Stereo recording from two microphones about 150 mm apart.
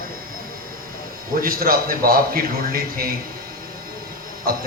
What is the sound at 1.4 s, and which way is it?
A man's voice, 75° right (ahead or behind).